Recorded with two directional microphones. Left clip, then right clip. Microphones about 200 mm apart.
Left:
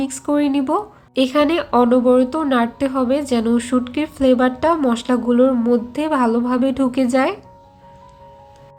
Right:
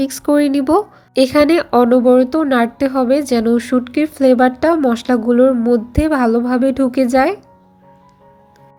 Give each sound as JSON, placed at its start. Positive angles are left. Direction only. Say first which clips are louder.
{"t": 0.0, "sound": "speech", "louder": "right 5 dB", "side_deg": -30}